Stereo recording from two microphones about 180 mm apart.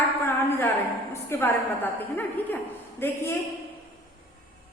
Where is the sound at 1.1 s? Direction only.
15° left (ahead or behind).